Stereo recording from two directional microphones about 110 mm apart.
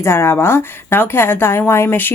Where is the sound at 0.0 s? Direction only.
25° left (ahead or behind).